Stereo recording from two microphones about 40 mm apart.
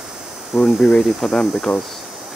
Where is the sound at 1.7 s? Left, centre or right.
Left.